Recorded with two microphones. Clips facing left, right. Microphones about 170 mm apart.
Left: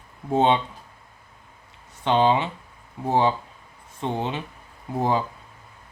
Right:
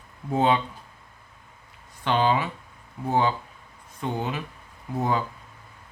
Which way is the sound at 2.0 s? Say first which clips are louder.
Left 3 dB; 25° left (ahead or behind).